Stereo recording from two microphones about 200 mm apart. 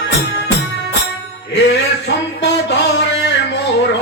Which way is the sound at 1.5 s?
60° left (ahead or behind).